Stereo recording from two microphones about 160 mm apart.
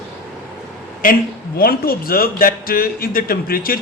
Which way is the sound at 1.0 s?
60° left (ahead or behind).